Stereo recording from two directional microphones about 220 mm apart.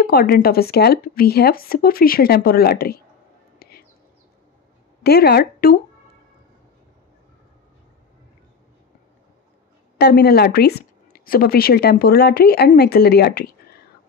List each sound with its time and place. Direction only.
0.0 s speech: 45° left (ahead or behind)
3.5 s whispering: 45° left (ahead or behind)
5.0 s speech: 45° left (ahead or behind)
9.9 s speech: 45° left (ahead or behind)